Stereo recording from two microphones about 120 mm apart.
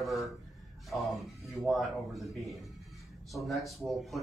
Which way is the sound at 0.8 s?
Centre (ahead or behind).